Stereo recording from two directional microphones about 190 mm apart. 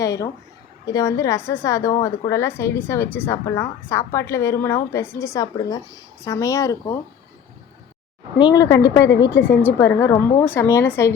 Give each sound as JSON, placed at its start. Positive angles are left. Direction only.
{"t": 0.0, "sound": "a woman's voice", "side_deg": 15}
{"t": 8.5, "sound": "a woman's voice", "side_deg": 20}